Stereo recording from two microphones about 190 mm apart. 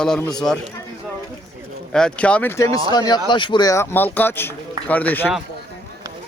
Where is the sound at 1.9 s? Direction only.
5° left (ahead or behind).